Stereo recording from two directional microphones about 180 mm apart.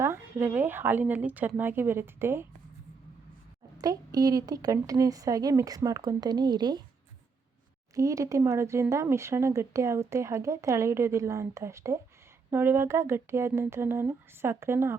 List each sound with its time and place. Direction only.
0.0 s speech: 15° right (ahead or behind)
3.8 s a woman's voice: 20° right (ahead or behind)
7.9 s speech: 20° right (ahead or behind)